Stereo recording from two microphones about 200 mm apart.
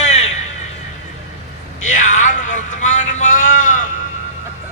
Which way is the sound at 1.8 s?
40° left (ahead or behind).